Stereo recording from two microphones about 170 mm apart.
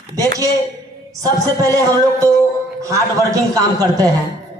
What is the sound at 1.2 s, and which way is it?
A man's voice, 20° right (ahead or behind).